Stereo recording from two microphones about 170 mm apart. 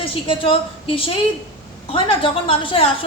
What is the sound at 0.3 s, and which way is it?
A woman's voice, 30° left (ahead or behind).